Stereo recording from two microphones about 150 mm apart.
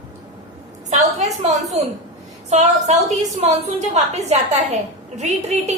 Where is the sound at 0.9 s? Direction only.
50° right (ahead or behind).